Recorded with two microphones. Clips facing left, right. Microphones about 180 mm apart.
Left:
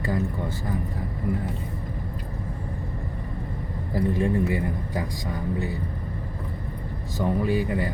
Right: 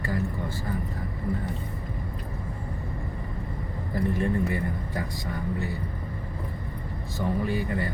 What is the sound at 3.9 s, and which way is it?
A man's voice, 15° left (ahead or behind).